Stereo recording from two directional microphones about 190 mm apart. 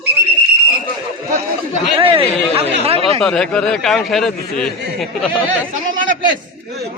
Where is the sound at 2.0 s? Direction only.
30° right (ahead or behind).